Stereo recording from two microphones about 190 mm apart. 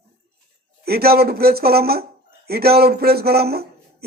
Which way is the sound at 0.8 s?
55° right (ahead or behind).